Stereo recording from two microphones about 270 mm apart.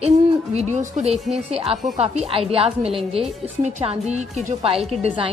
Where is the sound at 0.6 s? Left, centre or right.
Right.